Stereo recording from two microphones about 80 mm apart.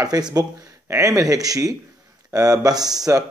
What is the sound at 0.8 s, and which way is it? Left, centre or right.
Speech, right.